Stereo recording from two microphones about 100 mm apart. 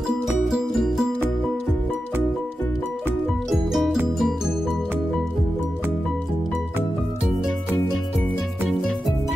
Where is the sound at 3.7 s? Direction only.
5° right (ahead or behind).